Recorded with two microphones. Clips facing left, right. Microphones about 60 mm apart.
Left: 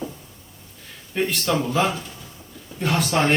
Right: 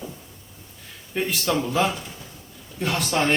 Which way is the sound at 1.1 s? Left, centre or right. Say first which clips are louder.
Left 1 dB; centre.